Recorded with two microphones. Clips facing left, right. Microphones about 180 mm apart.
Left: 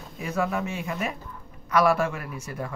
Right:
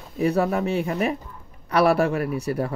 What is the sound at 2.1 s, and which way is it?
Speech, 65° right (ahead or behind).